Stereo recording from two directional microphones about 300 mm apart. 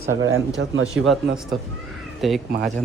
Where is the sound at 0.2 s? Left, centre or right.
Right.